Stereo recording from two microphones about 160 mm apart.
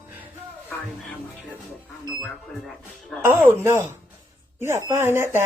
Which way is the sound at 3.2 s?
15° right (ahead or behind).